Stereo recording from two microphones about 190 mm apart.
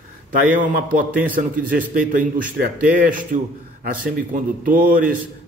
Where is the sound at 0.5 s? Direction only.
45° right (ahead or behind).